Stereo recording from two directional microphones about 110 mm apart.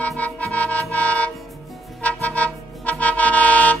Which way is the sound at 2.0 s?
15° left (ahead or behind).